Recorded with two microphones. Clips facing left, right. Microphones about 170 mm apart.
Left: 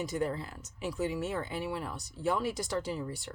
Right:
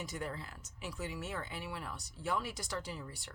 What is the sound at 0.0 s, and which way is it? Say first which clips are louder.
Speech: left 9 dB; 25° left (ahead or behind).